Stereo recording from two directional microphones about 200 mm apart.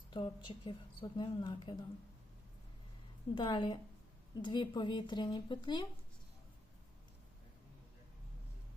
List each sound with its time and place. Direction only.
0.1 s a woman's voice: 25° left (ahead or behind)
3.3 s a woman's voice: 25° left (ahead or behind)